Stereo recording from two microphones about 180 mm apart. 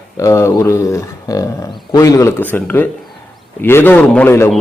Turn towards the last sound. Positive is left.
turn(degrees=10)  # may be behind; listen again after turning